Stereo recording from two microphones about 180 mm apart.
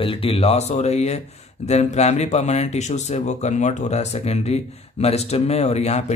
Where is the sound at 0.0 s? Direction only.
30° left (ahead or behind).